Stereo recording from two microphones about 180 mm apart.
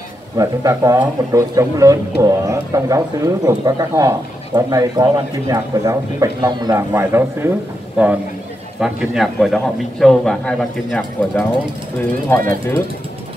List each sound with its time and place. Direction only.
0.4 s a man's voice: 15° right (ahead or behind); by 12.5 s 10° left (ahead or behind)